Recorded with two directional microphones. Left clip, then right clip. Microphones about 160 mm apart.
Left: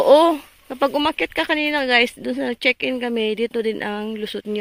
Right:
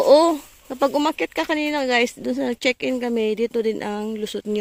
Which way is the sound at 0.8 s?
15° right (ahead or behind).